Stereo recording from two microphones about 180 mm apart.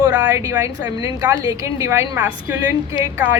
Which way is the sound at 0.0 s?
20° right (ahead or behind).